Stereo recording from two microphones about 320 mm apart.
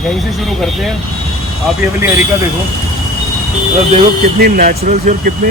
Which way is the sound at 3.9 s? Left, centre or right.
Right.